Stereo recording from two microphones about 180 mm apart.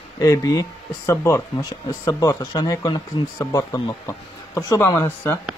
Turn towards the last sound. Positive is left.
turn(degrees=15)  # may be behind; listen again after turning